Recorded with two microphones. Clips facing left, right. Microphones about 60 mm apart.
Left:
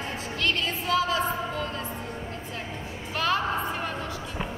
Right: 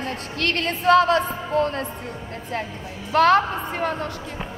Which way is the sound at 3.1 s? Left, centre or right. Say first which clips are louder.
Right 10 dB; right.